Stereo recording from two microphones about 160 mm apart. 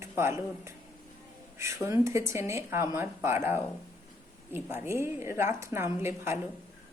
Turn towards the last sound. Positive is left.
turn(degrees=-15)  # may be behind; listen again after turning